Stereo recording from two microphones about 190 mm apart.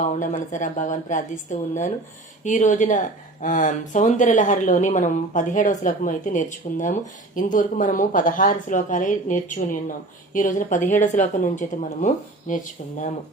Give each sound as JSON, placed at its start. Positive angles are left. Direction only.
{"t": 0.0, "sound": "a woman's voice", "side_deg": 40}